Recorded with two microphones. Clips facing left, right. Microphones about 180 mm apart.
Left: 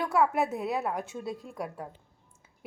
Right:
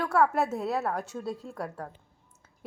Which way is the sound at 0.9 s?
Centre (ahead or behind).